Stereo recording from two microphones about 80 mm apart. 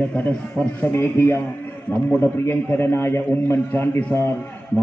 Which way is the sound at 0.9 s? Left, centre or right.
Left.